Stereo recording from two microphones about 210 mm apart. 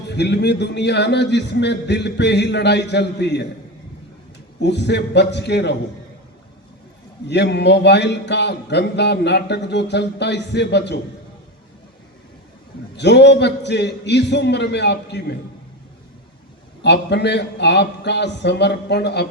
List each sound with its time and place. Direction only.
0.1 s speech: 55° left (ahead or behind)
4.6 s speech: 55° left (ahead or behind)
7.3 s speech: 55° left (ahead or behind)
13.0 s speech: 55° left (ahead or behind)
16.8 s speech: 55° left (ahead or behind)